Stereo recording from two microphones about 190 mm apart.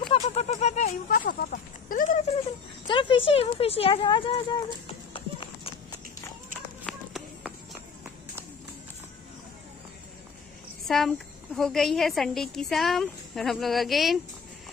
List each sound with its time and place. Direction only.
0.1 s a sound: 35° left (ahead or behind)
1.1 s a sound: 50° left (ahead or behind)
2.9 s speech: 25° left (ahead or behind)
4.8 s music: 30° left (ahead or behind)
6.9 s run: centre (ahead or behind)
10.9 s a woman's voice: centre (ahead or behind)